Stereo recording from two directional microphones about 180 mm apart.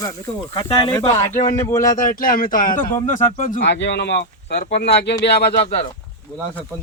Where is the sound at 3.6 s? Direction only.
75° left (ahead or behind).